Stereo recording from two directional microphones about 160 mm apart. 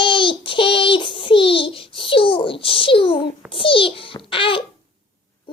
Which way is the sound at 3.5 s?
35° left (ahead or behind).